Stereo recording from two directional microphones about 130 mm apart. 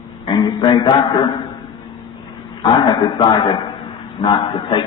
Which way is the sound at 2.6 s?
35° left (ahead or behind).